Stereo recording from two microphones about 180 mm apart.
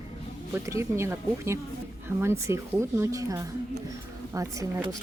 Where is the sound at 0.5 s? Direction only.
15° right (ahead or behind).